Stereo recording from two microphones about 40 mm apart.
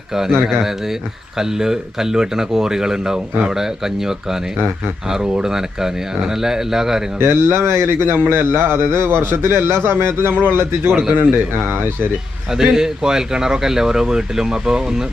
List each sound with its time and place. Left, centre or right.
1.4 s speech: centre
5.2 s speech: right
5.5 s speech: centre
7.2 s a man's voice: right
11.1 s speech: right
12.5 s speech: centre